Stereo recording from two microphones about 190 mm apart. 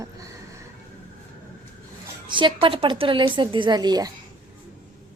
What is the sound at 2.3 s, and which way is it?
A woman's voice, 25° right (ahead or behind).